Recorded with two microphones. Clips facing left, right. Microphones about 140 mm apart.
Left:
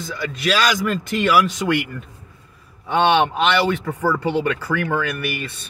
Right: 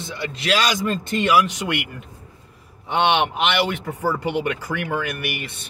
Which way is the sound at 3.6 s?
15° right (ahead or behind).